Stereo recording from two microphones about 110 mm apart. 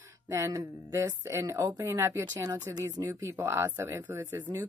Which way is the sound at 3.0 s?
25° right (ahead or behind).